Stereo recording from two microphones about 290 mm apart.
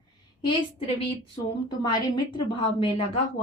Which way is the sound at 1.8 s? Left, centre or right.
Centre.